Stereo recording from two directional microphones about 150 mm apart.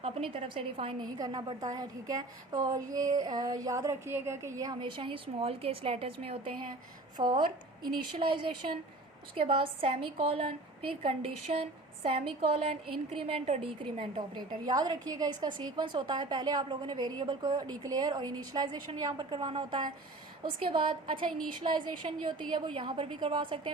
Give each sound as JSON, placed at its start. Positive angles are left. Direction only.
{"t": 0.0, "sound": "a woman's voice", "side_deg": -40}
{"t": 7.2, "sound": "a woman's voice", "side_deg": -35}
{"t": 9.3, "sound": "a woman's voice", "side_deg": -40}
{"t": 14.3, "sound": "a woman's voice", "side_deg": -25}
{"t": 22.0, "sound": "a woman's voice", "side_deg": -45}
{"t": 22.4, "sound": "a woman's voice", "side_deg": -30}